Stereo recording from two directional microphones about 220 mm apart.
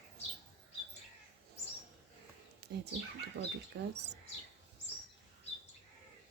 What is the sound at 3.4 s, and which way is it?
Speech, 50° right (ahead or behind).